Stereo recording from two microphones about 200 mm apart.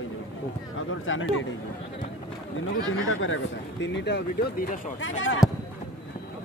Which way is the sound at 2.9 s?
80° left.